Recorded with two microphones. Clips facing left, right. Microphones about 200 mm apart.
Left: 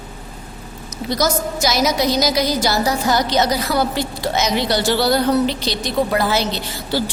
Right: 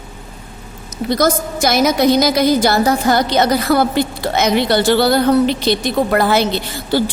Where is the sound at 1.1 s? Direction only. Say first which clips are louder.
Right 4 dB; 55° right (ahead or behind).